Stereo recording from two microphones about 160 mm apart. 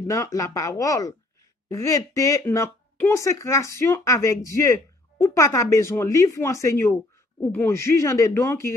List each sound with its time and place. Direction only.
0.0 s speech: 20° left (ahead or behind)